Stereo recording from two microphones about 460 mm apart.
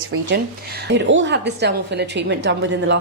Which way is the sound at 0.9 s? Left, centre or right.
Right.